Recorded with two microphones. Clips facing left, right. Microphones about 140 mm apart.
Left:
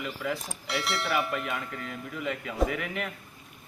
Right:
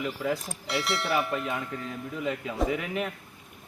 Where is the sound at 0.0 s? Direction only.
35° right (ahead or behind).